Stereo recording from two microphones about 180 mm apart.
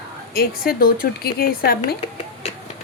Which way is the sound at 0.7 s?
55° left (ahead or behind).